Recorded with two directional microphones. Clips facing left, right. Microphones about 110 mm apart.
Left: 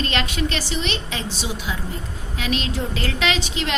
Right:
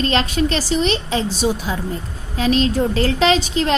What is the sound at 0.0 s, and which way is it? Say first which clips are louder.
A woman's voice: right 6 dB; 35° right (ahead or behind).